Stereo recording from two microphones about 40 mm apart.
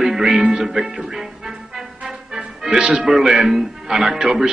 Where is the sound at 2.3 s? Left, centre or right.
Centre.